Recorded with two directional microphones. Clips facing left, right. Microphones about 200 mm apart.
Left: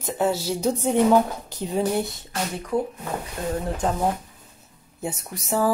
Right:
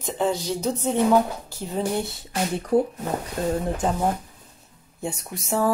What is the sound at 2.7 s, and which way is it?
Speech, 35° right (ahead or behind).